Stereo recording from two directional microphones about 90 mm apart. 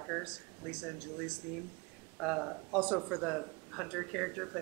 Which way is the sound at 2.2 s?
5° right (ahead or behind).